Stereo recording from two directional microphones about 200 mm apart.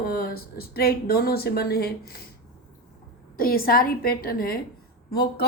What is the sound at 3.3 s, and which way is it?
A woman's voice, 50° left (ahead or behind).